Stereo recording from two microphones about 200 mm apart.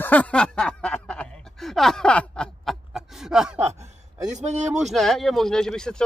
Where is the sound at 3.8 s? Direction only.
35° right (ahead or behind).